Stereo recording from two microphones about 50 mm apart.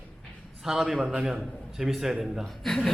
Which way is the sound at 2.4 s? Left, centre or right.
Centre.